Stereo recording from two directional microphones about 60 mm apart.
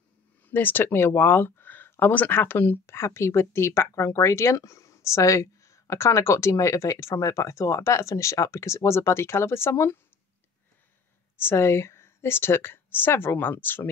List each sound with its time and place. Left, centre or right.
0.5 s speech: left
11.3 s speech: left